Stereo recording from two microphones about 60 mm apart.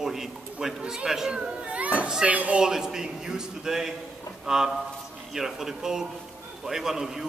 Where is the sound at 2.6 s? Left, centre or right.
Centre.